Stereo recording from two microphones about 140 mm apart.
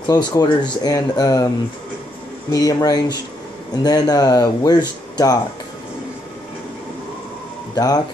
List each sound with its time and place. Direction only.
0.0 s speech: 30° left (ahead or behind)
2.5 s speech: 25° left (ahead or behind)
7.7 s speech: 25° left (ahead or behind)